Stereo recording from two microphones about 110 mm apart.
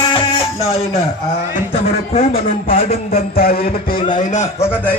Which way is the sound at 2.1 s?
60° left (ahead or behind).